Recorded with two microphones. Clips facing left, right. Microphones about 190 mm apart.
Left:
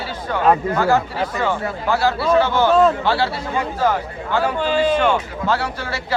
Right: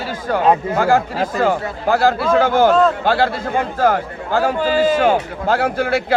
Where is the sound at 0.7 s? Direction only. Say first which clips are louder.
Right 2 dB; 40° right (ahead or behind).